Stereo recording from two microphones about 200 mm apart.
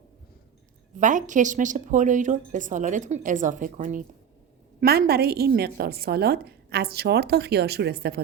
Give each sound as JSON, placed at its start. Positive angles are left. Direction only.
{"t": 0.9, "sound": "a woman's voice", "side_deg": -40}